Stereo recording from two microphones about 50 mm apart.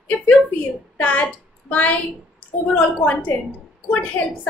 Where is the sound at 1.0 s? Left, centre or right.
Left.